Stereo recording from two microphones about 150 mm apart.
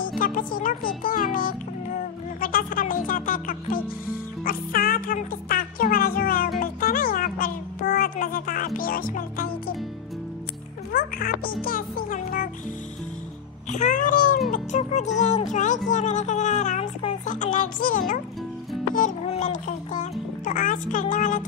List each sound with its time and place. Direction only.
0.2 s speech: 65° left (ahead or behind)
2.4 s music: 70° left (ahead or behind)
10.9 s music: 75° left (ahead or behind)
13.7 s music: 55° left (ahead or behind)
14.5 s speech: 50° left (ahead or behind)
19.2 s a child's voice: 50° left (ahead or behind)